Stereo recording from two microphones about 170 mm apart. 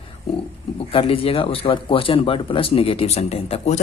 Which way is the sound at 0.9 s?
35° left (ahead or behind).